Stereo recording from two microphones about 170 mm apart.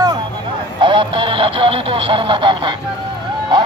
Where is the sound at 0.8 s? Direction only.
30° right (ahead or behind).